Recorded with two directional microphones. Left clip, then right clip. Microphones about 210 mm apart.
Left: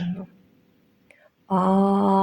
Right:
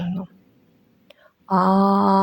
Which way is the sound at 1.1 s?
25° right (ahead or behind).